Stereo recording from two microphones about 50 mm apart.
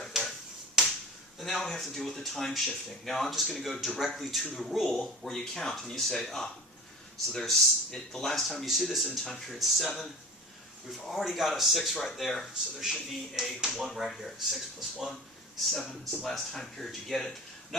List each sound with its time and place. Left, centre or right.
0.1 s finger snapping: centre
1.4 s speech: centre
9.0 s speech: centre
9.5 s speech: centre
16.2 s speech: centre